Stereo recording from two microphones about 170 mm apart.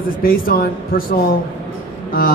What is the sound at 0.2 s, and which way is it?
Speech, 60° left (ahead or behind).